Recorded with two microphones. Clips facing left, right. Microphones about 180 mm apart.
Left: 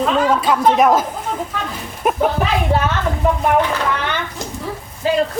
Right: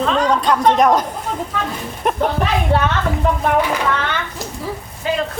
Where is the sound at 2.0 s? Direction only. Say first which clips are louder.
Left 1 dB; 5° left (ahead or behind).